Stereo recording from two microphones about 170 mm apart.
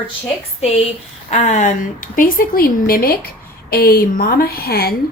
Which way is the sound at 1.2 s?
45° left (ahead or behind).